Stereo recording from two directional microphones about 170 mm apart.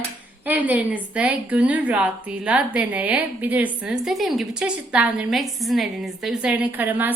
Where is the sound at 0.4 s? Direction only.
10° right (ahead or behind).